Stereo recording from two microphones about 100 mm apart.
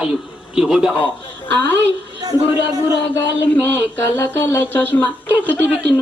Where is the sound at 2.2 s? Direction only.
40° right (ahead or behind).